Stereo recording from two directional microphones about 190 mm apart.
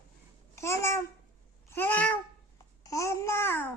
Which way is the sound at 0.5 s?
15° left (ahead or behind).